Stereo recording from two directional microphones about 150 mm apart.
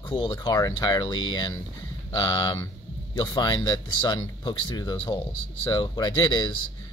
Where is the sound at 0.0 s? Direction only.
30° left (ahead or behind).